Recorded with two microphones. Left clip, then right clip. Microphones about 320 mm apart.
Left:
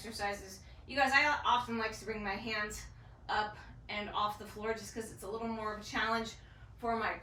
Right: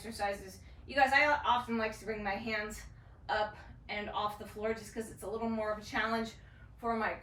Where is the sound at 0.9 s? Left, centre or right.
Centre.